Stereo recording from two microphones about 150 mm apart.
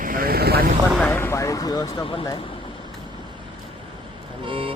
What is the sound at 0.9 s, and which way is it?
Speech, 5° left (ahead or behind).